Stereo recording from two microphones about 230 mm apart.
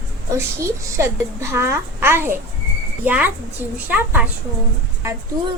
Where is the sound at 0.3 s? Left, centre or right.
Centre.